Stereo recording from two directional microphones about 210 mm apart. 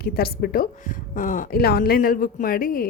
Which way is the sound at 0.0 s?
45° left (ahead or behind).